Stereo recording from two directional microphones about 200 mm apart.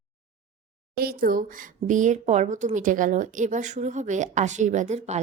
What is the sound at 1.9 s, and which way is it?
A woman's voice, 40° right (ahead or behind).